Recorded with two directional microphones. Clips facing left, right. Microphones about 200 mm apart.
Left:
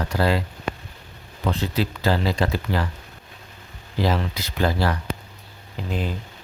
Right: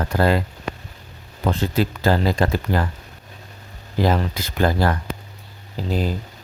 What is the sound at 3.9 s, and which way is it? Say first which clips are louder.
Speech: right 3 dB; 45° right (ahead or behind).